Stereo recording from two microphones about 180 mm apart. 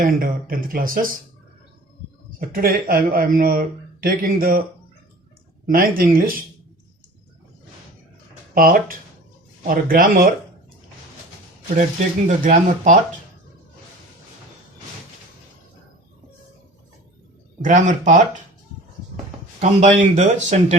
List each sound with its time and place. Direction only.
0.0 s speech: 50° right (ahead or behind)
2.5 s speech: 55° right (ahead or behind)
5.6 s speech: 55° right (ahead or behind)
8.5 s speech: 50° right (ahead or behind)
12.3 s speech: 40° right (ahead or behind)
17.6 s speech: 40° right (ahead or behind)
19.5 s speech: 40° right (ahead or behind)